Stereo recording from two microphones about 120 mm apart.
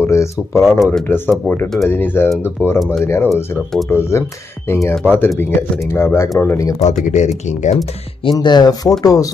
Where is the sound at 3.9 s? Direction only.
20° left (ahead or behind).